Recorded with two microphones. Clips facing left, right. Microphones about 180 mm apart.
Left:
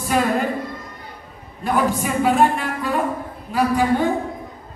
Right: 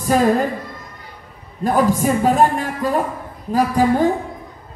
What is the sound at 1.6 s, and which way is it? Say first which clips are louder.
Speech: right 4 dB; 40° right (ahead or behind).